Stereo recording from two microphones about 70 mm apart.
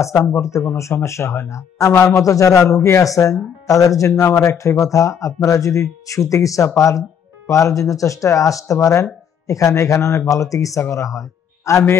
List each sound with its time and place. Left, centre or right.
0.0 s speech: left
4.1 s speech: left
4.6 s speech: left
8.7 s speech: left